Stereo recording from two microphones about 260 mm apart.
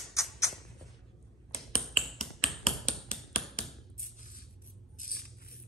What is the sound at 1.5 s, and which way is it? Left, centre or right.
Finger snapping, left.